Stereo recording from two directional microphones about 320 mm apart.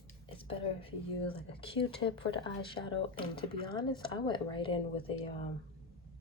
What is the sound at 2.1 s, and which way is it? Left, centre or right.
Speech, centre.